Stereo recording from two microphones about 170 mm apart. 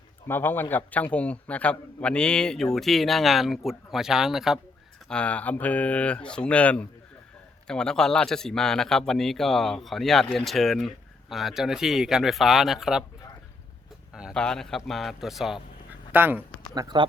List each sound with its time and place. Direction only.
0.3 s speech: 10° left (ahead or behind)
14.1 s a man's voice: 5° right (ahead or behind)
16.7 s speech: 25° right (ahead or behind)